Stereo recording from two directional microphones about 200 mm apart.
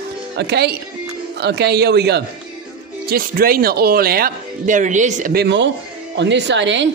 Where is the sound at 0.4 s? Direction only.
55° right (ahead or behind).